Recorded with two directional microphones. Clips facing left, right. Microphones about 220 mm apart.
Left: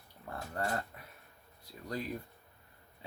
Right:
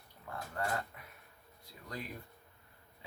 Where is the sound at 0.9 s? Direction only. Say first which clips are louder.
Left 2 dB; 35° left (ahead or behind).